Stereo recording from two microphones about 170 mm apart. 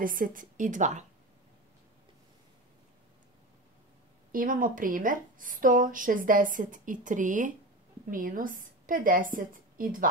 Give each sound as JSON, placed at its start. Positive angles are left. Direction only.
{"t": 0.0, "sound": "a woman's voice", "side_deg": -55}
{"t": 4.3, "sound": "a woman's voice", "side_deg": -55}